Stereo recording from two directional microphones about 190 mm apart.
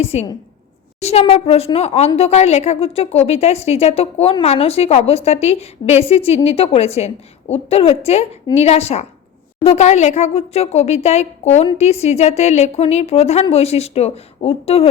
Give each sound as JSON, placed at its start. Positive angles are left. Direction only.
{"t": 0.0, "sound": "a woman's voice", "side_deg": 30}